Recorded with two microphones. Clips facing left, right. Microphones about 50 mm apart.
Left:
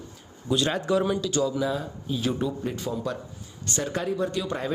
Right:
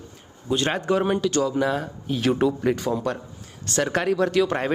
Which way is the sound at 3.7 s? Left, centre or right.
Right.